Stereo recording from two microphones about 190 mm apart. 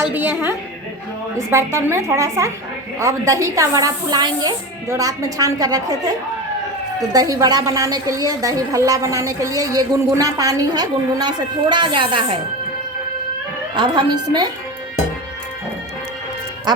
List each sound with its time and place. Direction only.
0.1 s speech: 10° right (ahead or behind)
7.1 s a woman's voice: 20° right (ahead or behind)
13.7 s a woman's voice: 25° right (ahead or behind)
16.7 s a woman's voice: 20° right (ahead or behind)